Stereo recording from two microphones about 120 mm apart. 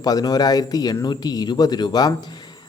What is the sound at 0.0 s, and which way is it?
Speech, 35° left (ahead or behind).